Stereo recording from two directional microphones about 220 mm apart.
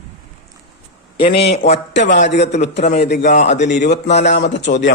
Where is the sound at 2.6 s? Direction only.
30° left (ahead or behind).